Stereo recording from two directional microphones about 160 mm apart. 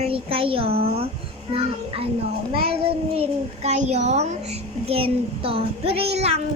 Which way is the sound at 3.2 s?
45° right (ahead or behind).